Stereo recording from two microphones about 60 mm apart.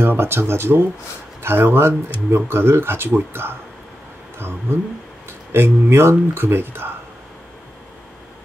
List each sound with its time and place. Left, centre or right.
0.0 s speech: right
4.4 s speech: right